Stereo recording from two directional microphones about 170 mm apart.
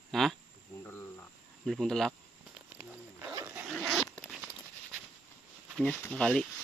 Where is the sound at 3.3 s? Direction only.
15° right (ahead or behind).